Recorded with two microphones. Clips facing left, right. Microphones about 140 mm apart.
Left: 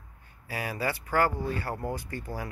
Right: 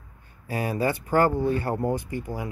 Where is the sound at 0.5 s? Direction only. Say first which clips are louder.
Right 6 dB; 25° right (ahead or behind).